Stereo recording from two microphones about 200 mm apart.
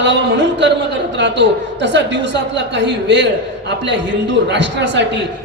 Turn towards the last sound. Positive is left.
turn(degrees=-60)  # may be behind; listen again after turning